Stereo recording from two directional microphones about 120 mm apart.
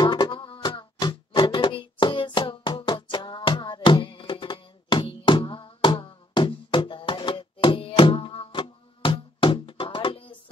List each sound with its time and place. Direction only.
0.0 s music: 40° left (ahead or behind)